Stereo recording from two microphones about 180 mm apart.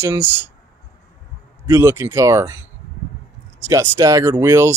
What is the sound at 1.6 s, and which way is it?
Speech, 15° right (ahead or behind).